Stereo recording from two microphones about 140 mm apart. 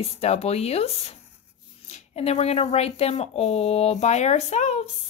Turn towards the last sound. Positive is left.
turn(degrees=50)  # may be behind; listen again after turning